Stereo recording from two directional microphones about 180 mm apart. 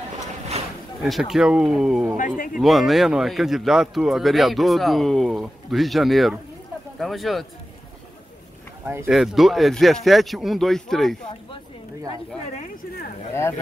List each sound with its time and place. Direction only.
1.0 s speech: centre (ahead or behind)
2.1 s speech: 45° left (ahead or behind)
2.5 s speech: centre (ahead or behind)
8.8 s speech: 15° right (ahead or behind)
9.1 s speech: centre (ahead or behind)
13.3 s speech: 15° left (ahead or behind)